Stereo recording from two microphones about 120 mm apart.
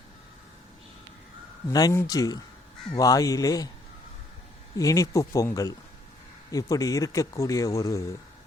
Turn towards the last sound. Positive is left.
turn(degrees=25)  # may be behind; listen again after turning